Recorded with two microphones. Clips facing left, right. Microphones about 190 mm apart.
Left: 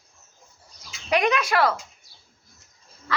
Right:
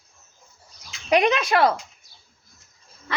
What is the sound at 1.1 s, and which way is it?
Speech, 25° right (ahead or behind).